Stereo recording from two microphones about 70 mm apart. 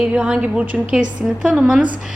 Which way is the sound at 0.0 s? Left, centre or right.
Centre.